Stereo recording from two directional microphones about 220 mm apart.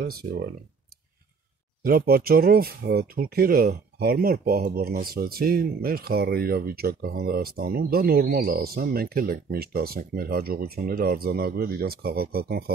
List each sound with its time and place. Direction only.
0.0 s speech: 45° right (ahead or behind)
1.8 s speech: 40° right (ahead or behind)